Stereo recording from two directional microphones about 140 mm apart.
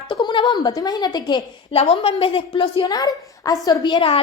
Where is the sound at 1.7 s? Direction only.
45° left (ahead or behind).